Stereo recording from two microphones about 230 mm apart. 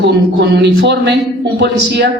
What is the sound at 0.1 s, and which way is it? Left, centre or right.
Speech, right.